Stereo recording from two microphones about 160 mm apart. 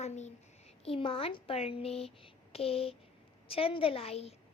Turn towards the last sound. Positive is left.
turn(degrees=40)  # may be behind; listen again after turning